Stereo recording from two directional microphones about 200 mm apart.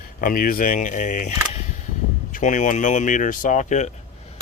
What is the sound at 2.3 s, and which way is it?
Speech, 40° left (ahead or behind).